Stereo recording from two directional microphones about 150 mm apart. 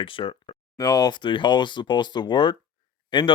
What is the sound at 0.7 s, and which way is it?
Speech, 25° left (ahead or behind).